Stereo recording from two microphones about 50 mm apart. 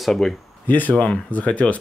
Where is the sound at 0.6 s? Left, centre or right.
Left.